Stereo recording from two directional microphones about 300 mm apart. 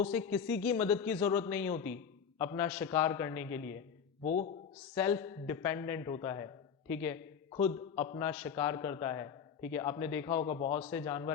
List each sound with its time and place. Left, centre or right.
0.1 s a man's voice: centre
4.2 s a man's voice: left
4.9 s a man's voice: centre
7.5 s a man's voice: left
8.2 s a man's voice: centre